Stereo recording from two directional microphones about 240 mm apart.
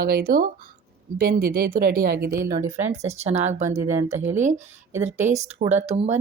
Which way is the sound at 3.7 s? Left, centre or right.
Centre.